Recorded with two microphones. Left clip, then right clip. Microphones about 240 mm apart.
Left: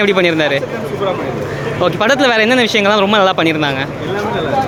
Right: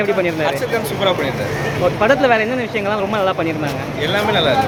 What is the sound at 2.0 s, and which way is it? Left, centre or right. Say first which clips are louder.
Speech: left 2 dB; left.